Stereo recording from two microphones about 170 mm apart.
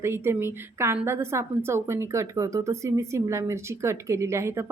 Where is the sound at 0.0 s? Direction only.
15° right (ahead or behind).